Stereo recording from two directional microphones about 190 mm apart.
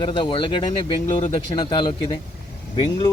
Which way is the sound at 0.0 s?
25° left (ahead or behind).